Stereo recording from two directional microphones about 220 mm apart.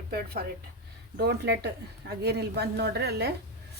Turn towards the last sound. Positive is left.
turn(degrees=-50)  # may be behind; listen again after turning